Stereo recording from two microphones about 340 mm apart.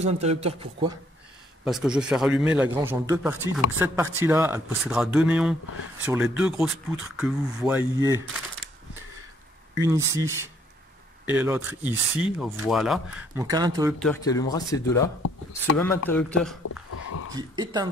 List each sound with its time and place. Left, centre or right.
0.0 s a man's voice: centre
1.6 s speech: centre
9.8 s a man's voice: centre
13.9 s speech: centre
16.9 s dog: left
17.3 s a man's voice: centre